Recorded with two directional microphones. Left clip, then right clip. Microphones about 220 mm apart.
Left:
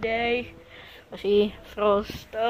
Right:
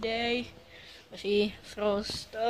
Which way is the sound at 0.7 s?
15° left (ahead or behind).